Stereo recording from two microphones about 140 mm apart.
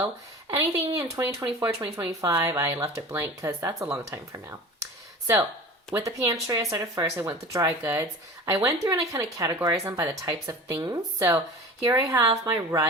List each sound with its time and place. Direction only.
0.5 s speech: 25° right (ahead or behind)